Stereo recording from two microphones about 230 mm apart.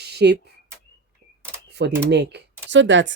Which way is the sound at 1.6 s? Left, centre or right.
Right.